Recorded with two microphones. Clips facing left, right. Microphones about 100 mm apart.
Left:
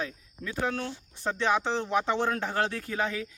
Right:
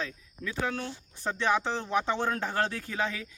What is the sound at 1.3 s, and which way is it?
Speech, 25° left (ahead or behind).